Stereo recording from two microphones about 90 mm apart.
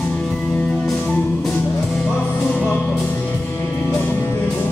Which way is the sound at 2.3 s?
20° left (ahead or behind).